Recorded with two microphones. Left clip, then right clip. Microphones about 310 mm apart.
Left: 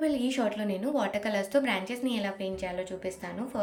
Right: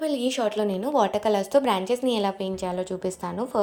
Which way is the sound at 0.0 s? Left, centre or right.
Centre.